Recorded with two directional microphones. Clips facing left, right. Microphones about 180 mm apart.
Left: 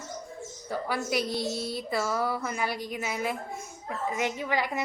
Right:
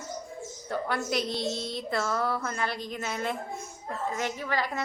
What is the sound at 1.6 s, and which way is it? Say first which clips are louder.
A woman's voice: left 1 dB; 5° left (ahead or behind).